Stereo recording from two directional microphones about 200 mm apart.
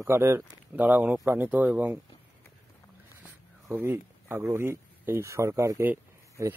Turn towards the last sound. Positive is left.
turn(degrees=-10)  # may be behind; listen again after turning